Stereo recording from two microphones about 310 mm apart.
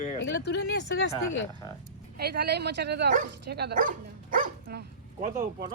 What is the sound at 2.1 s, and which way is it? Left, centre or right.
Speech, right.